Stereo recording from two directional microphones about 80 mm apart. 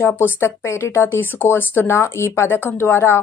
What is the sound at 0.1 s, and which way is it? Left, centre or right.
A woman's voice, left.